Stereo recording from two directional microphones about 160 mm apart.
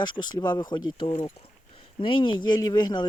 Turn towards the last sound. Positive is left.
turn(degrees=25)  # may be behind; listen again after turning